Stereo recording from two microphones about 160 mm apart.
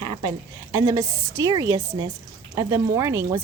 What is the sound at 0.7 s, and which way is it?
A woman's voice, 20° right (ahead or behind).